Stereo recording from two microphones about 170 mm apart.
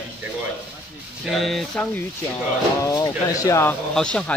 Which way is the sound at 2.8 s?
20° left (ahead or behind).